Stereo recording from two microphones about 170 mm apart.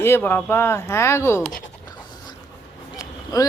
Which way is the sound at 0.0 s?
15° left (ahead or behind).